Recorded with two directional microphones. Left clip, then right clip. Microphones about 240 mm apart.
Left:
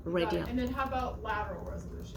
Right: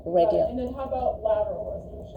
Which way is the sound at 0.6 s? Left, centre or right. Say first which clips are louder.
Right 4 dB; left.